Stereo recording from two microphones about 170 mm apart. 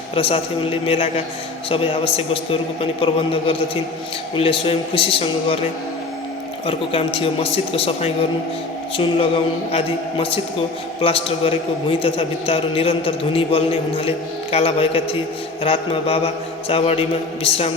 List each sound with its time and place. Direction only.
0.1 s a man's voice: 35° left (ahead or behind)
6.7 s a man's voice: 35° left (ahead or behind)